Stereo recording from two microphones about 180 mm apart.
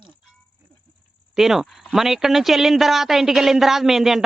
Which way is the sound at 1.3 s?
Centre (ahead or behind).